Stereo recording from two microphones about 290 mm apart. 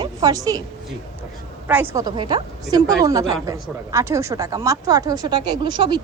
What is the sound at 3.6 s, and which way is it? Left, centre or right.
Speech, centre.